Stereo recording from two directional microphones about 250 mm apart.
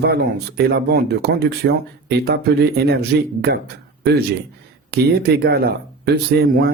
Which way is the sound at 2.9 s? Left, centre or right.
Right.